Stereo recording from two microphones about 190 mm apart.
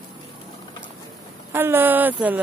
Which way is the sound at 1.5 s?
10° right (ahead or behind).